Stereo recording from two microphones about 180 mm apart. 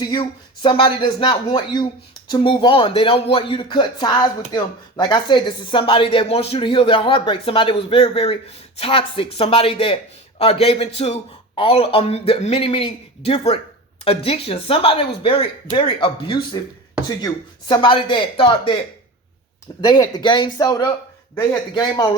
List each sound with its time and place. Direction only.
0.0 s a man's voice: 25° left (ahead or behind)
19.8 s speech: 20° left (ahead or behind)